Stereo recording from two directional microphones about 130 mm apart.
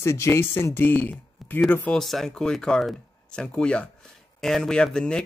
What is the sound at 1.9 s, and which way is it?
Speech, centre (ahead or behind).